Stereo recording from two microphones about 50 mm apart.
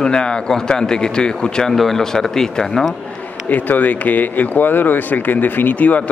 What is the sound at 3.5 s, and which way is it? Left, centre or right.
Speech, left.